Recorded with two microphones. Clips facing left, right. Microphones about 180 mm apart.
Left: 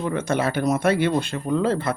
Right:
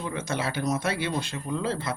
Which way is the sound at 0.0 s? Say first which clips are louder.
Left 7 dB; 55° left (ahead or behind).